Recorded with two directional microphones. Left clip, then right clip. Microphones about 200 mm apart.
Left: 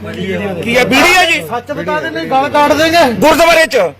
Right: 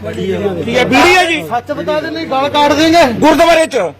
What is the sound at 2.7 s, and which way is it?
Speech, 45° left (ahead or behind).